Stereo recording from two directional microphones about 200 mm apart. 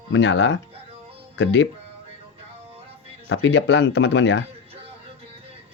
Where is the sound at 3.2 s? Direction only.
65° left (ahead or behind).